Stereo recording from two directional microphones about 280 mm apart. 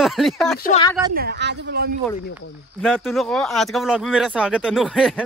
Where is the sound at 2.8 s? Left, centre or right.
Centre.